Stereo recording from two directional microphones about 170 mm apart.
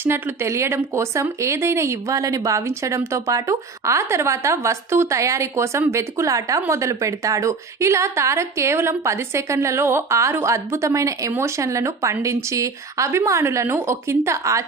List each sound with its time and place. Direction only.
0.0 s speech: 15° right (ahead or behind)